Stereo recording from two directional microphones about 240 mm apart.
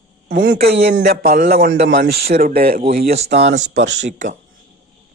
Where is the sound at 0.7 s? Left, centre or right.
Right.